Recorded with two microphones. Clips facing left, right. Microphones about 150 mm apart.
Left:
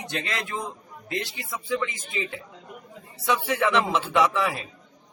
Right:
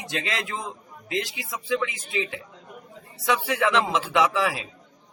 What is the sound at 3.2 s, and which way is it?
A man's voice, 10° right (ahead or behind).